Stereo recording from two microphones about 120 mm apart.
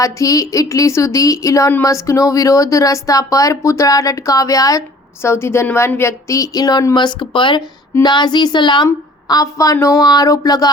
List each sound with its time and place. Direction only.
0.0 s speech: 30° left (ahead or behind)